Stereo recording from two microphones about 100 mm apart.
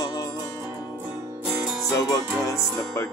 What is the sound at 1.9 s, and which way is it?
Music, 30° left (ahead or behind).